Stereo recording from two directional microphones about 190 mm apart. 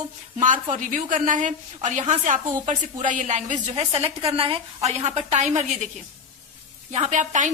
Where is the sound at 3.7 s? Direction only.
30° right (ahead or behind).